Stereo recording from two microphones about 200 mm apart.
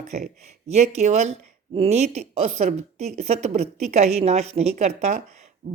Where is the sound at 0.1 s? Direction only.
35° right (ahead or behind).